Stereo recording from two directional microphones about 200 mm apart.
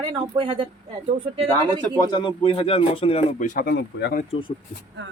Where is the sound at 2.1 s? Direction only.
25° left (ahead or behind); by 4.2 s 50° left (ahead or behind).